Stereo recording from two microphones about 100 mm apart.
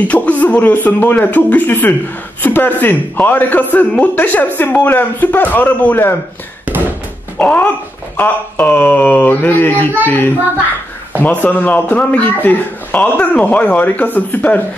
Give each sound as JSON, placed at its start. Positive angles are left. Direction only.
{"t": 0.1, "sound": "a man's voice", "side_deg": 15}
{"t": 7.3, "sound": "a man's voice", "side_deg": 15}